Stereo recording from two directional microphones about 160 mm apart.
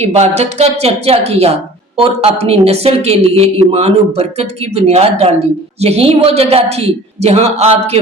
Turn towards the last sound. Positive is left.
turn(degrees=-40)  # may be behind; listen again after turning